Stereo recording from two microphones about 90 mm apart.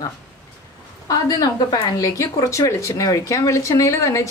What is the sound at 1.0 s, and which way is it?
Speech, 45° left (ahead or behind).